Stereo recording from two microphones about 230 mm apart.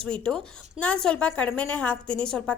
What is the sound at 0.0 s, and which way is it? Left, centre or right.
A woman's voice, centre.